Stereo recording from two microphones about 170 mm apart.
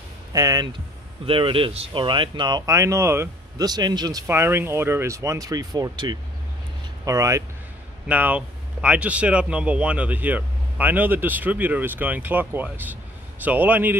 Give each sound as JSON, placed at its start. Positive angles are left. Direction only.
{"t": 0.3, "sound": "speech", "side_deg": -20}
{"t": 1.2, "sound": "speech", "side_deg": -30}
{"t": 4.3, "sound": "speech", "side_deg": -15}